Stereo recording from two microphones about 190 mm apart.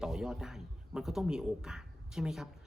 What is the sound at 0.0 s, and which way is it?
A man's voice, centre (ahead or behind).